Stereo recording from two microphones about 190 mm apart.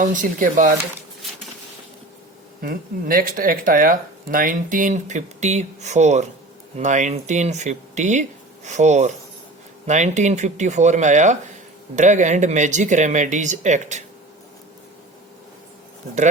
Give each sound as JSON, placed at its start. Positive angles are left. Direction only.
{"t": 0.0, "sound": "speech", "side_deg": -45}
{"t": 2.6, "sound": "speech", "side_deg": -50}